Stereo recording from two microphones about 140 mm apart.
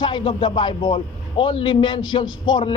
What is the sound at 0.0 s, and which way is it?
A man's voice, 35° left (ahead or behind).